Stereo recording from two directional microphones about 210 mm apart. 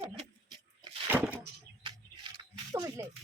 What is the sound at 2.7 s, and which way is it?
Speech, 15° right (ahead or behind).